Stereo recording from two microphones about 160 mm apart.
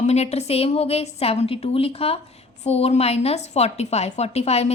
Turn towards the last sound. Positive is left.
turn(degrees=40)  # may be behind; listen again after turning